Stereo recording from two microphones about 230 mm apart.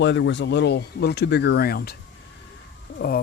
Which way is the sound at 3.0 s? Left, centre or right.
Left.